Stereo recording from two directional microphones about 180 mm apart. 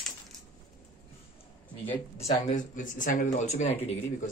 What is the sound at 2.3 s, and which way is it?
Speech, 45° left (ahead or behind).